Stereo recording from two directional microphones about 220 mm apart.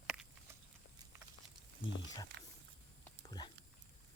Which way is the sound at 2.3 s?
50° right (ahead or behind).